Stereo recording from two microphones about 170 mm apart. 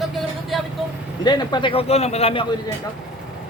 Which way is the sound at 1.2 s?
25° left (ahead or behind).